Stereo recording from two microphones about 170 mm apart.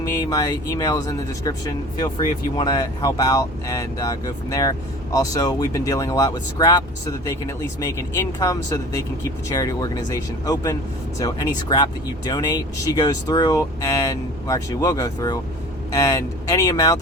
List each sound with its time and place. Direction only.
0.0 s speech: 20° left (ahead or behind)